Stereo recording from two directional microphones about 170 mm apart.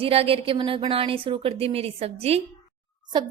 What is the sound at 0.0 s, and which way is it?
A woman's voice, 35° right (ahead or behind).